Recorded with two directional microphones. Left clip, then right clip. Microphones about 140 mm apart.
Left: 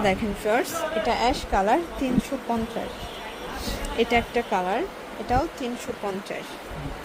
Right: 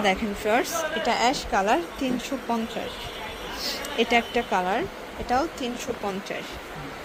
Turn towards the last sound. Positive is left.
turn(degrees=5)  # may be behind; listen again after turning